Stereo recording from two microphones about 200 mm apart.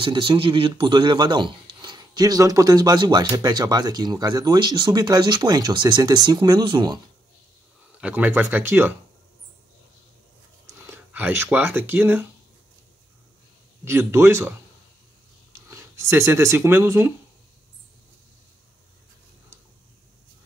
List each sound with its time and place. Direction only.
0.0 s speech: 25° right (ahead or behind)
8.0 s speech: 10° right (ahead or behind)
10.7 s speech: 10° right (ahead or behind)
13.8 s speech: 10° right (ahead or behind)
15.7 s speech: 10° right (ahead or behind)